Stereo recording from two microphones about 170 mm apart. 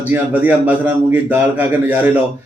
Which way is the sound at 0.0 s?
10° right (ahead or behind).